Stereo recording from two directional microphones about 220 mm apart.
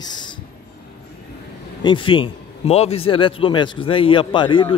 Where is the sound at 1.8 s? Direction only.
20° left (ahead or behind).